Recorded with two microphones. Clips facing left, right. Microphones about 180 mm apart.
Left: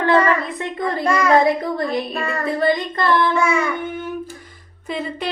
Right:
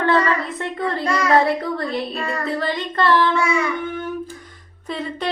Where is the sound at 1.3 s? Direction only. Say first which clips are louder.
Left 1 dB; 15° left (ahead or behind).